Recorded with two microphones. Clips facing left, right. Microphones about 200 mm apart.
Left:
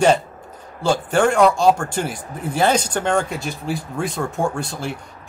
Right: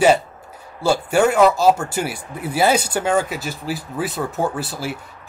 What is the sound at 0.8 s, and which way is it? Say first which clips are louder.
Speech: right 1 dB; 10° right (ahead or behind).